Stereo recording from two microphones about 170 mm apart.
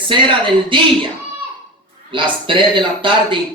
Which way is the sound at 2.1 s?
30° right (ahead or behind).